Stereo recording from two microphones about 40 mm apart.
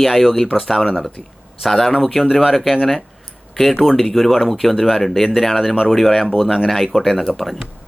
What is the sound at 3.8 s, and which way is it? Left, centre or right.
Speech, centre.